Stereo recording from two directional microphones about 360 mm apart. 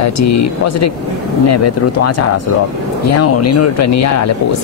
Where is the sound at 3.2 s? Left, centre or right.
Left.